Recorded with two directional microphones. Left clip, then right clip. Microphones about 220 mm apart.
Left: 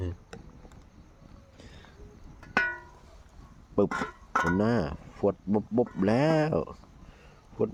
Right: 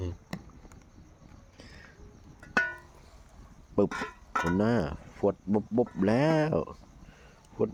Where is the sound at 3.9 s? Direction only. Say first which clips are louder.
Left 3 dB; 20° left (ahead or behind).